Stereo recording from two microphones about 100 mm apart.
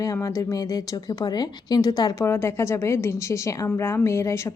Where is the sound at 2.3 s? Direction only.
25° left (ahead or behind).